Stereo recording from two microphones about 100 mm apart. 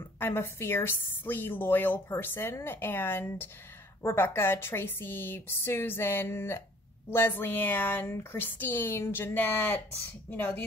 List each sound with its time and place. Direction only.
0.2 s a woman's voice: 25° left (ahead or behind)